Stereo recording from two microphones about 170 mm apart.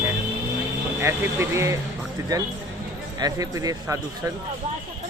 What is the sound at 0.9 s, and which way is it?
Speech, 15° right (ahead or behind).